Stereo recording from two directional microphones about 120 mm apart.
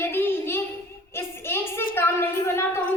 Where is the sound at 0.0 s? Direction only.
20° left (ahead or behind).